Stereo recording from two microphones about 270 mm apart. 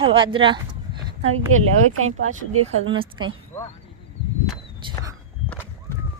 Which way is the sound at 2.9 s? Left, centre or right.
Centre.